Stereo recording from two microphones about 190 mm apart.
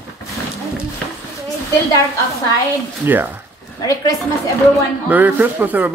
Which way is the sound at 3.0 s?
10° right (ahead or behind).